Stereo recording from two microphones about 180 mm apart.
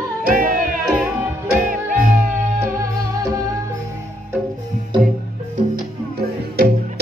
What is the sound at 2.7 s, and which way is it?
Music, 20° right (ahead or behind).